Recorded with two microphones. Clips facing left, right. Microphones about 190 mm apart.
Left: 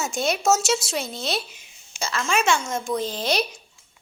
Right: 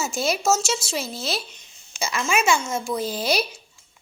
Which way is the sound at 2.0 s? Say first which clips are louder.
Right 1 dB; 10° right (ahead or behind).